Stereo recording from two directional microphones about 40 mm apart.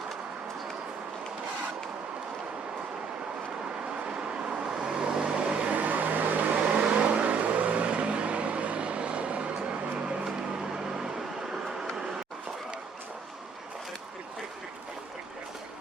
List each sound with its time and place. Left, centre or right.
4.0 s vehicle: right
5.7 s vehicle: right
6.7 s vehicle: right